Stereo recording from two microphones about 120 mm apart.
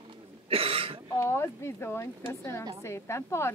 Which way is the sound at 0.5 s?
50° right (ahead or behind).